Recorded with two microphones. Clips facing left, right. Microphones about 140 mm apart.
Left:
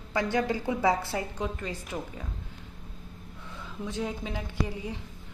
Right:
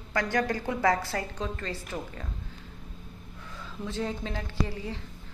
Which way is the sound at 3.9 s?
10° left (ahead or behind).